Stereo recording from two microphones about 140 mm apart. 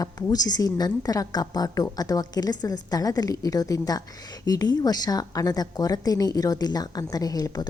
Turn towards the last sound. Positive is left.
turn(degrees=25)  # may be behind; listen again after turning